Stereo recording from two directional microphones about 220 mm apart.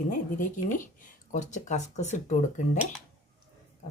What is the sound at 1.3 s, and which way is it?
Speech, 35° left (ahead or behind).